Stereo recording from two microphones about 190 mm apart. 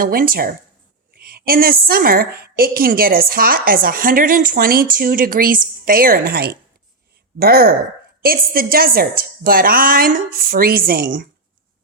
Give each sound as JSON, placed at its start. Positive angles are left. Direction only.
{"t": 0.0, "sound": "a woman's voice", "side_deg": -50}